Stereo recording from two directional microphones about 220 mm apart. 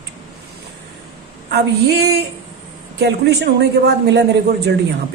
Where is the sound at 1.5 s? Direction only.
45° right (ahead or behind).